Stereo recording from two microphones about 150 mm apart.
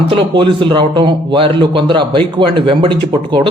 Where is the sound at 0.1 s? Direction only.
35° right (ahead or behind).